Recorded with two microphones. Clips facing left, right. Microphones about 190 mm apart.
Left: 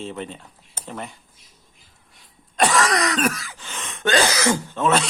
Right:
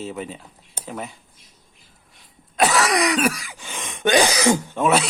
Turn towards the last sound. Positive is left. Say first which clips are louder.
# right 1 dB
turn(degrees=-10)  # may be behind; listen again after turning